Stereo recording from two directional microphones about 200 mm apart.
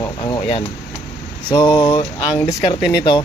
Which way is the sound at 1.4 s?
15° left (ahead or behind).